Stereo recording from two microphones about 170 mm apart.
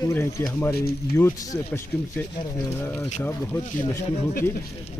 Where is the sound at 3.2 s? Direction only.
10° left (ahead or behind).